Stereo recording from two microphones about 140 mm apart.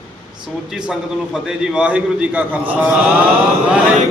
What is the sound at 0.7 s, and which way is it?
A man's voice, 5° right (ahead or behind).